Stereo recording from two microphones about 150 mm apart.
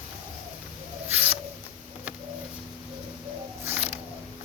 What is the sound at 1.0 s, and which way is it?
Rodents, 10° right (ahead or behind).